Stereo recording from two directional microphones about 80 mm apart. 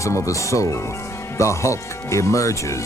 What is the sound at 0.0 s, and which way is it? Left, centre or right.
Speech, left.